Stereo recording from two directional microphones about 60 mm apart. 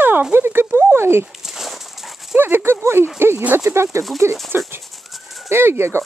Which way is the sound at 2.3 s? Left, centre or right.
Right.